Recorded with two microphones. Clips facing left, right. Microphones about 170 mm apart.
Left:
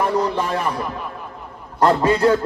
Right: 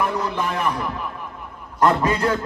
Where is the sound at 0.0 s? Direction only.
30° left (ahead or behind).